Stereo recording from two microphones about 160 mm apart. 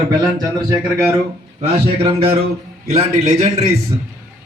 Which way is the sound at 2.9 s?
40° right (ahead or behind).